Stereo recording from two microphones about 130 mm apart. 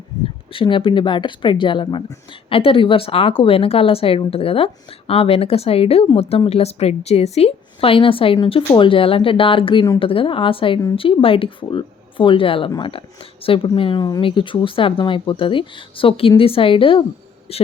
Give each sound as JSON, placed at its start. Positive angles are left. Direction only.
{"t": 0.5, "sound": "a man's voice", "side_deg": 40}